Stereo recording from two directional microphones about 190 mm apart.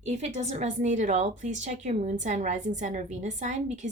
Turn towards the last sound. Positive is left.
turn(degrees=-40)  # may be behind; listen again after turning